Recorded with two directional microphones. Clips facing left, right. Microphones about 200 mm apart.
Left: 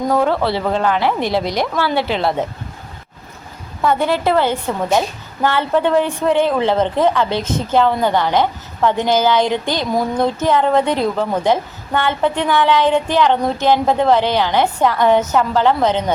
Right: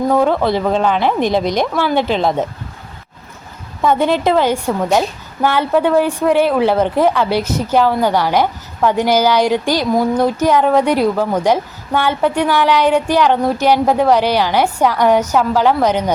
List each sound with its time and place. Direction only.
0.1 s a woman's voice: 10° right (ahead or behind)
3.8 s a woman's voice: 20° right (ahead or behind)